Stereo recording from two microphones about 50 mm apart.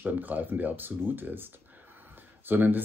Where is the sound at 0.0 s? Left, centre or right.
Right.